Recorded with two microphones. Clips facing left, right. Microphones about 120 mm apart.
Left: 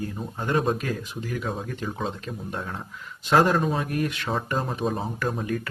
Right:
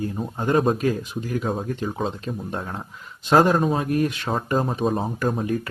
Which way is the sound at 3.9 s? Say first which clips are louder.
Right 4 dB; 25° right (ahead or behind).